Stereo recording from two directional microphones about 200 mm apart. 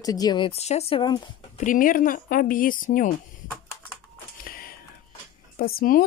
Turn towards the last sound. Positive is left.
turn(degrees=45)  # may be behind; listen again after turning